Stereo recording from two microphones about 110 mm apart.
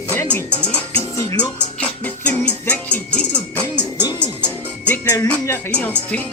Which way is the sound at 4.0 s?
40° left (ahead or behind).